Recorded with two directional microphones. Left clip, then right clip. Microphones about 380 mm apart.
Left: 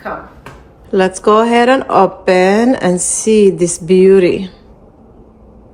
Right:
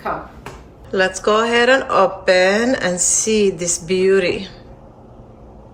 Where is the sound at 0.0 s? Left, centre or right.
Centre.